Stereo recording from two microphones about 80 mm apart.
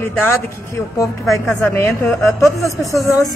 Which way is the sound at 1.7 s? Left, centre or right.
Left.